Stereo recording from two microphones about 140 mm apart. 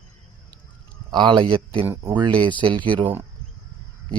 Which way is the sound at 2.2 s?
35° right (ahead or behind).